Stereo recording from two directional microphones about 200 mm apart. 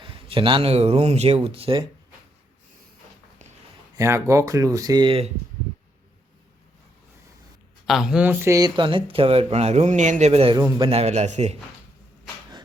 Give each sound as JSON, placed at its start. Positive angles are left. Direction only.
{"t": 0.0, "sound": "speech", "side_deg": -25}
{"t": 3.9, "sound": "speech", "side_deg": -15}
{"t": 7.9, "sound": "a man's voice", "side_deg": 0}